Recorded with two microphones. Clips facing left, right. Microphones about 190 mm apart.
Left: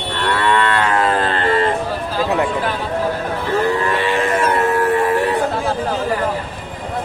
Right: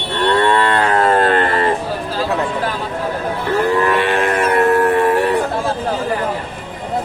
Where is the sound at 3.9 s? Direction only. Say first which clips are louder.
Right 2 dB; 60° right (ahead or behind).